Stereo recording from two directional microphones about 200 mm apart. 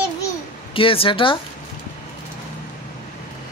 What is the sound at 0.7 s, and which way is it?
Speech, 25° left (ahead or behind).